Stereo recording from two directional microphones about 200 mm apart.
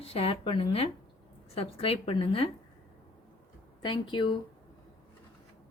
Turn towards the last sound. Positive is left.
turn(degrees=25)  # may be behind; listen again after turning